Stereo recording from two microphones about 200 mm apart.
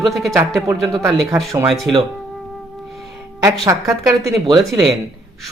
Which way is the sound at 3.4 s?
15° right (ahead or behind).